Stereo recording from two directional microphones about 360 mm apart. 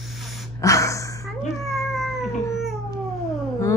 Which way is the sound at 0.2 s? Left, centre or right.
Centre.